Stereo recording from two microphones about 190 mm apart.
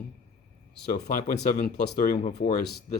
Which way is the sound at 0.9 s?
45° left (ahead or behind).